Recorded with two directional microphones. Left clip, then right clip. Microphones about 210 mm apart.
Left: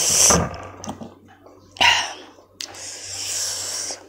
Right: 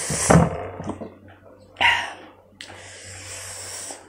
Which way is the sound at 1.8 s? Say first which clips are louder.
Left 3 dB; 35° left (ahead or behind).